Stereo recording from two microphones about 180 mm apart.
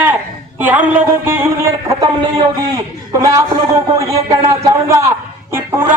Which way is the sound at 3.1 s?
20° right (ahead or behind).